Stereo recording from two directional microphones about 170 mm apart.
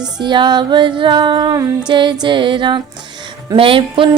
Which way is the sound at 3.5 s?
30° right (ahead or behind).